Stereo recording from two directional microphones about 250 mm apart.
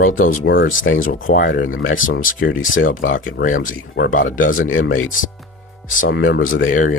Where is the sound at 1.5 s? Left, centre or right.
Left.